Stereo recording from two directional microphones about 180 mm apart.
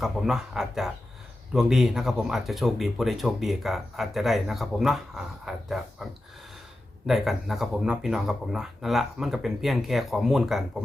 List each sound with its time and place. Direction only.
0.0 s speech: 5° right (ahead or behind)
7.1 s speech: centre (ahead or behind)